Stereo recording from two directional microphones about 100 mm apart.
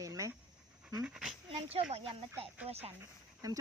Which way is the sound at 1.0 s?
5° right (ahead or behind).